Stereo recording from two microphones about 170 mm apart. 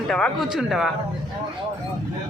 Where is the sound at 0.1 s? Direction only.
5° left (ahead or behind).